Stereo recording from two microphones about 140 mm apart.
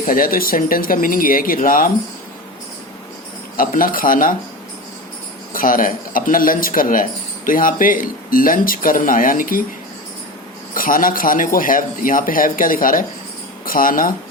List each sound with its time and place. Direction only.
0.0 s speech: 90° left
3.6 s speech: 85° left
5.5 s speech: 85° left
10.8 s speech: 90° left